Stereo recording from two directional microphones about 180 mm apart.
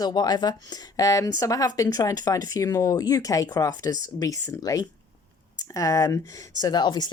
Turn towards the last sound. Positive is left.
turn(degrees=25)  # may be behind; listen again after turning